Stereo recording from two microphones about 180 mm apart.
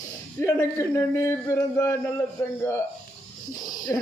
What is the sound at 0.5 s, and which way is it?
Speech, 15° left (ahead or behind).